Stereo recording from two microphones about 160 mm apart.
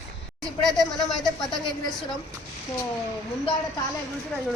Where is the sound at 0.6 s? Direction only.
Centre (ahead or behind).